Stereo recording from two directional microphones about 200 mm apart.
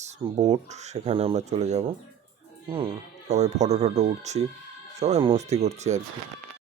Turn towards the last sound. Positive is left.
turn(degrees=-35)  # may be behind; listen again after turning